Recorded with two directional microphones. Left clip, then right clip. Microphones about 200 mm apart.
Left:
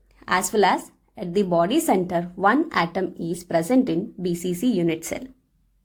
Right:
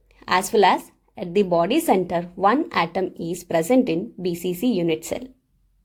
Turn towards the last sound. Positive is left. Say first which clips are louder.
# right 1 dB
turn(degrees=-30)  # may be behind; listen again after turning